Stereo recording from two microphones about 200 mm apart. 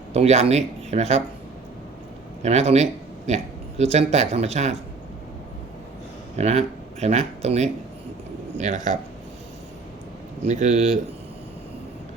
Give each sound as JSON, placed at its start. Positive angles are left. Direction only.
{"t": 0.1, "sound": "speech", "side_deg": -30}
{"t": 2.4, "sound": "speech", "side_deg": -35}
{"t": 6.3, "sound": "speech", "side_deg": -30}
{"t": 10.4, "sound": "speech", "side_deg": -35}